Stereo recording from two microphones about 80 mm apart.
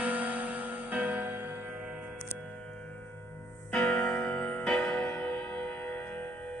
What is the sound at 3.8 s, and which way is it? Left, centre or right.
Keyboard, centre.